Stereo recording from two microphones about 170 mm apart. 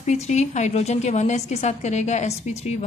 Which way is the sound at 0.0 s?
40° left (ahead or behind).